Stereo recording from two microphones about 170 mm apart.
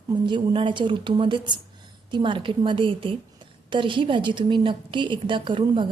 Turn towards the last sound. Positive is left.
turn(degrees=-30)  # may be behind; listen again after turning